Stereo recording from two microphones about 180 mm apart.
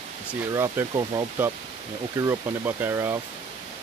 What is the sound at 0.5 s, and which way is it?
Speech, 15° right (ahead or behind).